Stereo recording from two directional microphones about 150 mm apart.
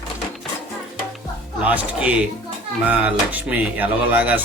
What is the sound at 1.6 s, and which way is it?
Speech, 10° right (ahead or behind).